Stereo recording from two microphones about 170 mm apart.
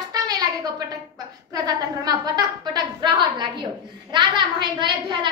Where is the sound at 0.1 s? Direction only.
25° right (ahead or behind).